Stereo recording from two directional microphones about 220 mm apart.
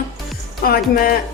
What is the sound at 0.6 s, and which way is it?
Speech, 40° left (ahead or behind).